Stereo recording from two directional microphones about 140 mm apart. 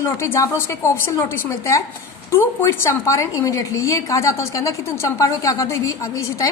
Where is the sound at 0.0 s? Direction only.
20° left (ahead or behind).